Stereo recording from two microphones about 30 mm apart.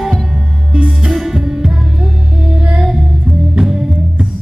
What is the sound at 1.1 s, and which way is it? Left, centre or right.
Music, centre.